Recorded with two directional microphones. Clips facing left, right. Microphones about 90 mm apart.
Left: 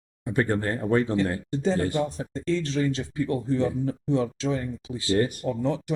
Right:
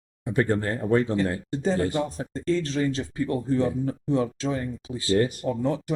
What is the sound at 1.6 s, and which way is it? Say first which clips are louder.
Speech: even; 40° right (ahead or behind).